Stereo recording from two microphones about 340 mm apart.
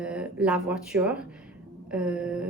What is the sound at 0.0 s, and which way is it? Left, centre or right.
Speech, centre.